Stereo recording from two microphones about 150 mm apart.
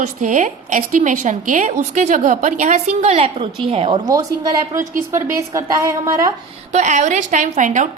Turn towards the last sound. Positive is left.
turn(degrees=-55)  # may be behind; listen again after turning